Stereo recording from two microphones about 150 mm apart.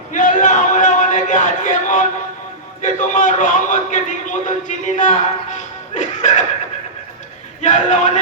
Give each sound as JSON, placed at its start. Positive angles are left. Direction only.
{"t": 0.1, "sound": "a sound", "side_deg": 55}
{"t": 2.8, "sound": "a man's voice", "side_deg": 55}
{"t": 7.6, "sound": "a man's voice", "side_deg": 55}